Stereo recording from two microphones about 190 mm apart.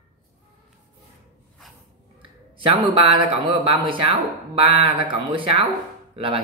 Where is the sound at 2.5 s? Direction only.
25° right (ahead or behind).